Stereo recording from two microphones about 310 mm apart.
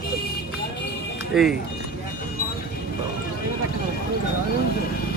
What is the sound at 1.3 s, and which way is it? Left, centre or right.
Speech, centre.